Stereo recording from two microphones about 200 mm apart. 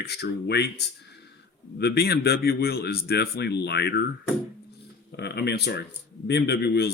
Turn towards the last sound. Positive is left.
turn(degrees=55)  # may be behind; listen again after turning